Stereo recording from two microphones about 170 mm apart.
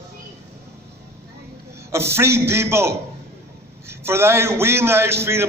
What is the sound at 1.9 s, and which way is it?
A man's voice, 15° right (ahead or behind).